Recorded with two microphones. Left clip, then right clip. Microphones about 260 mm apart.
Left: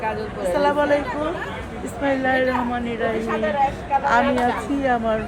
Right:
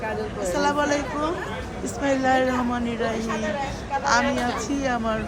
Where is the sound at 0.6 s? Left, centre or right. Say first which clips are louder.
Left 3 dB; centre.